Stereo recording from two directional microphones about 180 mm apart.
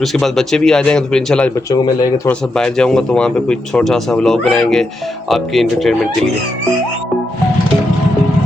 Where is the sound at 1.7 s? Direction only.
20° left (ahead or behind).